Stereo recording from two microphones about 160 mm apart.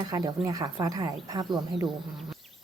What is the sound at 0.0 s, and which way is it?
A woman's voice, 25° right (ahead or behind).